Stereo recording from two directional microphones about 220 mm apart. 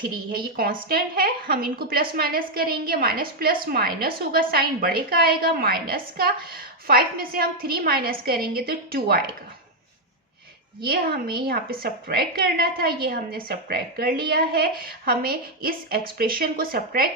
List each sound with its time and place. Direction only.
0.5 s a woman's voice: 40° right (ahead or behind)
10.8 s a woman's voice: 45° right (ahead or behind)